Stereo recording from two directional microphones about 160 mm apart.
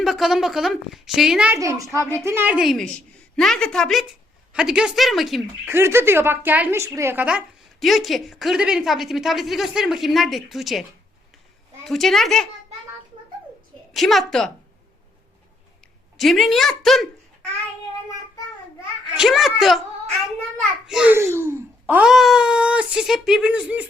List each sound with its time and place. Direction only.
0.0 s a woman's voice: centre (ahead or behind)
1.5 s a woman's voice: 20° right (ahead or behind); by 5.4 s centre (ahead or behind)
5.6 s a woman's voice: 15° right (ahead or behind); by 10.8 s centre (ahead or behind)
11.9 s a woman's voice: centre (ahead or behind)
13.9 s a woman's voice: centre (ahead or behind)
16.1 s a woman's voice: centre (ahead or behind)
19.1 s a woman's voice: centre (ahead or behind)